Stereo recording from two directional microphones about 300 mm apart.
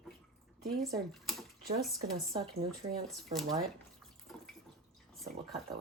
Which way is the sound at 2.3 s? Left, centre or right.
Centre.